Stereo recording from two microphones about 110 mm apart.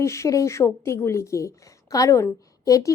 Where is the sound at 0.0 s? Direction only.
25° left (ahead or behind).